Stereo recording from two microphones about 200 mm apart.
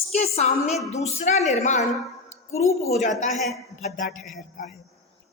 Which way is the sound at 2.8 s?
35° left (ahead or behind).